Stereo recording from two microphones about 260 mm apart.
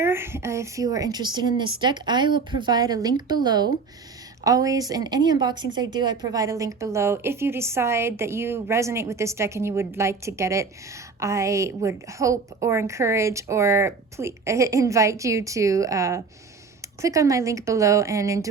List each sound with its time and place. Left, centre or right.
0.0 s a woman's voice: centre